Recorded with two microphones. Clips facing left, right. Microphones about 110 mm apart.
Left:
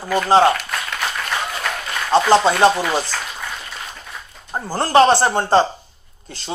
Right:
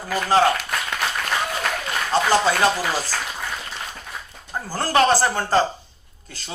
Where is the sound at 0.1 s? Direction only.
30° left (ahead or behind).